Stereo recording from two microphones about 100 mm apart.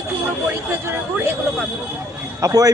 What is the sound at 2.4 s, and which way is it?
Speech, 40° right (ahead or behind).